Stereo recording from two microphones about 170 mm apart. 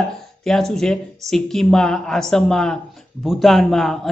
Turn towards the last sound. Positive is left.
turn(degrees=0)  # may be behind; listen again after turning